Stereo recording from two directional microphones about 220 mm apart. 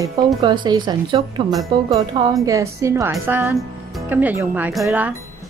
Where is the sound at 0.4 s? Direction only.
20° right (ahead or behind).